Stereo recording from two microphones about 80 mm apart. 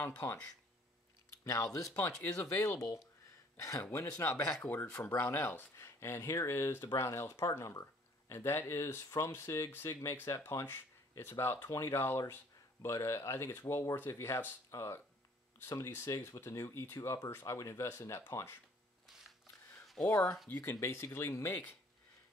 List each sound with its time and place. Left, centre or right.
0.0 s speech: left
1.4 s speech: left
3.8 s speech: left
20.0 s speech: centre
20.5 s speech: left